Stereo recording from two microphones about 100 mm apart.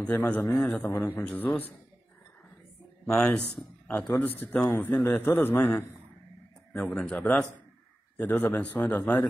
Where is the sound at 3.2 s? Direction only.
5° left (ahead or behind).